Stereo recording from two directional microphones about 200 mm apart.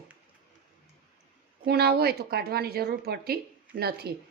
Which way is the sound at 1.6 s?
50° right (ahead or behind).